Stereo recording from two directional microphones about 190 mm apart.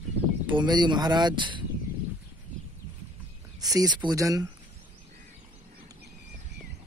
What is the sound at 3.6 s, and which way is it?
Speech, 20° right (ahead or behind).